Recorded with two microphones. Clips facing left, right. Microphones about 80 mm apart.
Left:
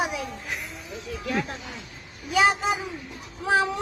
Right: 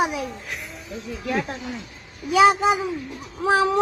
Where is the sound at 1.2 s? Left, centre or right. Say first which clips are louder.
Right 3 dB; right.